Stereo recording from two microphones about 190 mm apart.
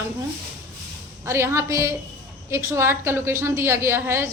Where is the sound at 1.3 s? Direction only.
15° right (ahead or behind).